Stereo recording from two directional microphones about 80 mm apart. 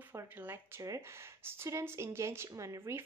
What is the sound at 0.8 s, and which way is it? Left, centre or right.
Speech, right.